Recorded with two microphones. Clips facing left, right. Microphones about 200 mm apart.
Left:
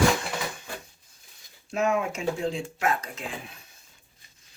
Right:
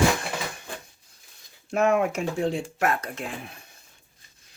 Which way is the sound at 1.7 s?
60° right (ahead or behind).